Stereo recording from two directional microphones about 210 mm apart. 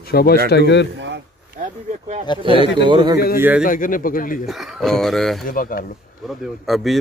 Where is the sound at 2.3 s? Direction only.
20° left (ahead or behind).